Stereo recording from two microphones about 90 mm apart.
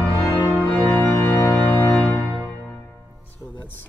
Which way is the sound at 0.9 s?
25° left (ahead or behind).